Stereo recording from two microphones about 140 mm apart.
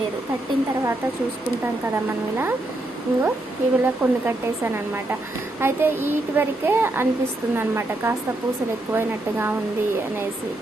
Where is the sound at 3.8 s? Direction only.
15° right (ahead or behind).